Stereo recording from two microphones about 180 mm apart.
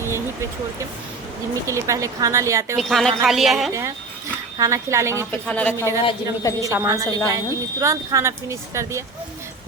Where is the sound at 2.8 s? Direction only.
Centre (ahead or behind).